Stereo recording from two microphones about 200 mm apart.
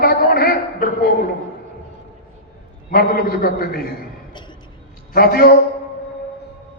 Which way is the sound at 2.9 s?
50° left (ahead or behind).